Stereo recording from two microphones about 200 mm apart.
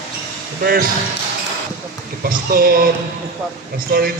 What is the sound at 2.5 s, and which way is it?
Speech, 50° right (ahead or behind).